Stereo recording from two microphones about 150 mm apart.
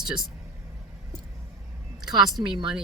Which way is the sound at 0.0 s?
5° right (ahead or behind).